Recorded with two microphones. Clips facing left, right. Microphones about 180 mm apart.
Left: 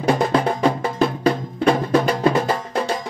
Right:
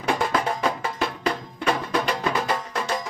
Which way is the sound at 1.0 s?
50° left (ahead or behind).